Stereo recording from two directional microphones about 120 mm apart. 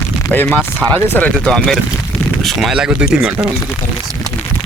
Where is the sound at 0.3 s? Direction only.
15° left (ahead or behind); by 3.3 s 5° right (ahead or behind).